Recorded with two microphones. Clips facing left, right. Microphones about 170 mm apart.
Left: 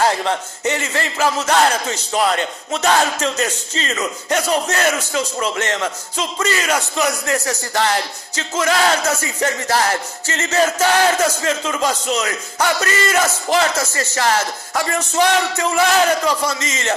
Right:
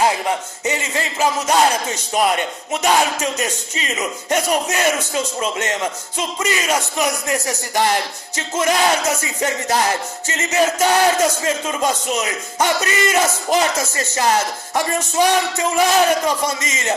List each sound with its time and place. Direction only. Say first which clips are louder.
0.0 s speech: even; 15° right (ahead or behind)